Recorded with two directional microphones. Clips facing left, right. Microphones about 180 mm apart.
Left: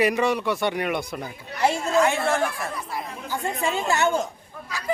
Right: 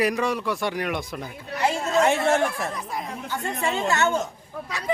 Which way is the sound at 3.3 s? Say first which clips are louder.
Left 1 dB; 10° left (ahead or behind).